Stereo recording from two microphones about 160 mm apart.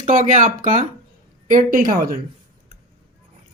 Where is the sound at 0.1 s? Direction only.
55° right (ahead or behind).